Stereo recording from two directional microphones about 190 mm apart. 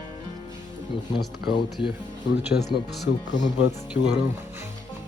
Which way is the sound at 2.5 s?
65° left (ahead or behind).